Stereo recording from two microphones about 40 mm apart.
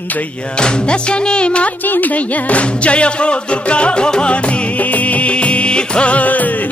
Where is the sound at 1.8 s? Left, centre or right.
Left.